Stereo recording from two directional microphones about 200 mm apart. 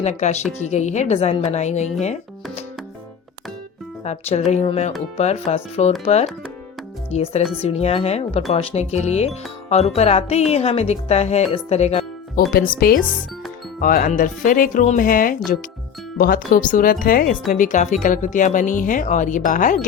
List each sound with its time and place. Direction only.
0.0 s speech: 35° left (ahead or behind)
4.0 s speech: 35° left (ahead or behind)
7.1 s speech: 35° left (ahead or behind)
12.5 s speech: 50° left (ahead or behind)